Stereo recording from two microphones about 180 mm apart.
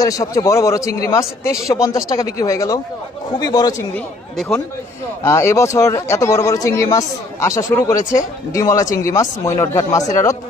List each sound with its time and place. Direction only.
0.0 s speech: 20° left (ahead or behind)
3.9 s speech: 5° left (ahead or behind)
5.2 s speech: 15° left (ahead or behind)